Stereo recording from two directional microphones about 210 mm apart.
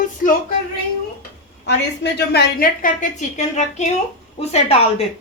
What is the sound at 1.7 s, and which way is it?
A woman's voice, 55° left (ahead or behind).